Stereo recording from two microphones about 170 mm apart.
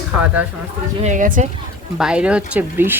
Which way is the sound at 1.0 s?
50° right (ahead or behind).